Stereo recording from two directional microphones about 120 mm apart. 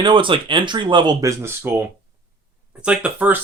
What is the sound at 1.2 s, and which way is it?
Speech, 20° right (ahead or behind).